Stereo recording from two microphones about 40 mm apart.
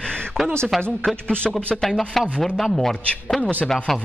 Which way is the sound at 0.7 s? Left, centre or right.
Centre.